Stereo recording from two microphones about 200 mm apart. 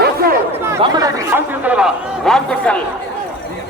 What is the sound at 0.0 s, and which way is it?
Chatter, 50° right (ahead or behind).